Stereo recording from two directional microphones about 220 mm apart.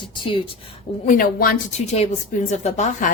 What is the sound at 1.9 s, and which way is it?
A woman's voice, 30° left (ahead or behind).